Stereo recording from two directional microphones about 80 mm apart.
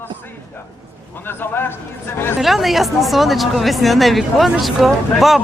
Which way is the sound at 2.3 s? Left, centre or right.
Centre.